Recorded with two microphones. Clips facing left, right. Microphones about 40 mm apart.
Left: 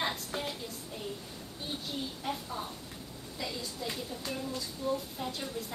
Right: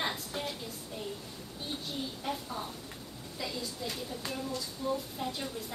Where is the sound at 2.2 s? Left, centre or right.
Centre.